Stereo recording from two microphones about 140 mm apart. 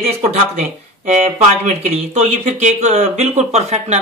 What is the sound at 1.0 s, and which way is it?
A man's voice, 50° right (ahead or behind).